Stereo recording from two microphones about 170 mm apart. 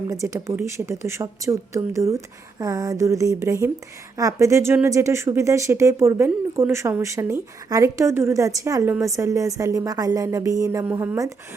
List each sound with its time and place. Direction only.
0.1 s speech: 20° right (ahead or behind)